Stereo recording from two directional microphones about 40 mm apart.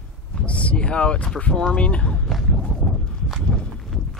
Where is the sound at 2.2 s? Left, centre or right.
Centre.